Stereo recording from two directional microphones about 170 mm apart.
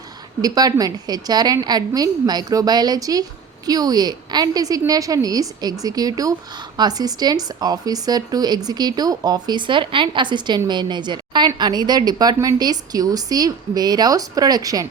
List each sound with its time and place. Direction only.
0.4 s speech: 20° right (ahead or behind)